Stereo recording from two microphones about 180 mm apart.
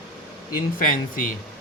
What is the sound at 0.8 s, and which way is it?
Speech, 50° left (ahead or behind).